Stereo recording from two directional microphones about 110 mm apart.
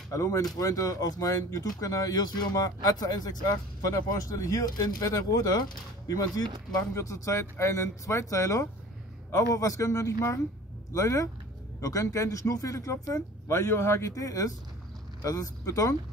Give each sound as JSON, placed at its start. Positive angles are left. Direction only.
{"t": 0.1, "sound": "speech", "side_deg": 30}